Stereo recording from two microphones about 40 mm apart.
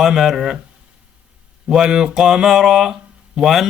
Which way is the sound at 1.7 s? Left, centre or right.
Centre.